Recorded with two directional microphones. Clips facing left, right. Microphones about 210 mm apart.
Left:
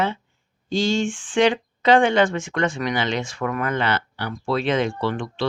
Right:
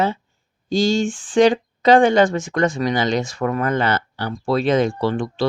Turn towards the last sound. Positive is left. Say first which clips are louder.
# right 4 dB
turn(degrees=-40)  # may be behind; listen again after turning